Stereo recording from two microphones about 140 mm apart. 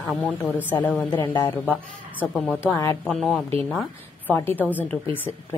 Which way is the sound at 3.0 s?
Centre (ahead or behind).